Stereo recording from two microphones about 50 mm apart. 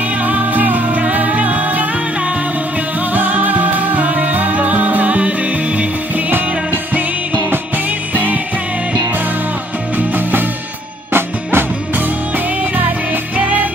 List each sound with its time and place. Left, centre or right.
0.2 s music: right
3.1 s music: right
8.1 s music: right
9.9 s music: right
12.7 s music: right